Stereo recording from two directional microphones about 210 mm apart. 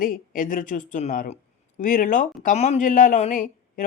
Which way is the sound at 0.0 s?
40° left (ahead or behind).